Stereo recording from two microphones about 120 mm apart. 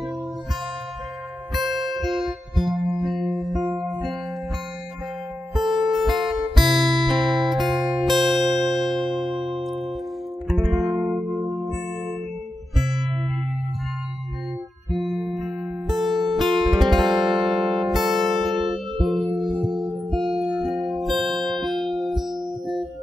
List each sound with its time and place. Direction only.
1.5 s music: centre (ahead or behind)
5.9 s music: centre (ahead or behind)
7.2 s music: 35° right (ahead or behind)
7.5 s music: 5° right (ahead or behind)
12.7 s music: centre (ahead or behind)
14.9 s music: centre (ahead or behind)